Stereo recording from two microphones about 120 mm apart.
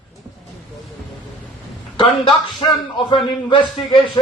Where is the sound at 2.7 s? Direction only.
40° left (ahead or behind).